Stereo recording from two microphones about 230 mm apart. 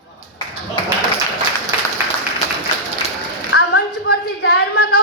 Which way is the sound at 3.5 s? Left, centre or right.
Left.